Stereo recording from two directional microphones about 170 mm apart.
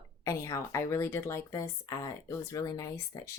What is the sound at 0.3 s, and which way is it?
Speech, 20° left (ahead or behind).